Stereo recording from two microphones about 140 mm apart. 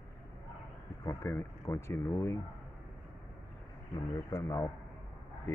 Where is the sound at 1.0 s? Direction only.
20° left (ahead or behind).